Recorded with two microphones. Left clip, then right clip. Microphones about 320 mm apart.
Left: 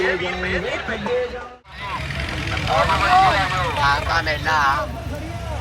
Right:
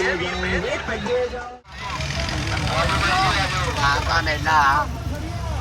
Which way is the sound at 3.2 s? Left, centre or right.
Centre.